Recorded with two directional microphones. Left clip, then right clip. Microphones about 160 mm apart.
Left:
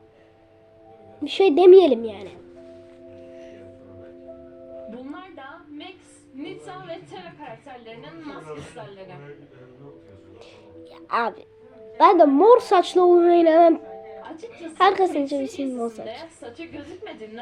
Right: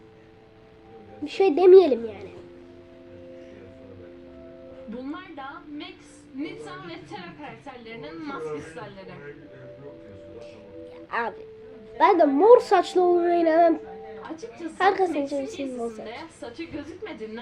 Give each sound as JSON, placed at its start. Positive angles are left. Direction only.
{"t": 1.2, "sound": "a woman's voice", "side_deg": 40}
{"t": 11.1, "sound": "a woman's voice", "side_deg": 40}
{"t": 14.8, "sound": "a woman's voice", "side_deg": 45}